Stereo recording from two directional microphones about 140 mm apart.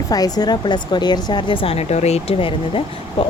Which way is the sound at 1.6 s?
50° left (ahead or behind).